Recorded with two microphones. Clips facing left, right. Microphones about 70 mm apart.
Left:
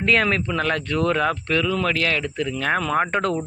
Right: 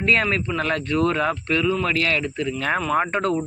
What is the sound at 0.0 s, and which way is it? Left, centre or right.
Speech, left.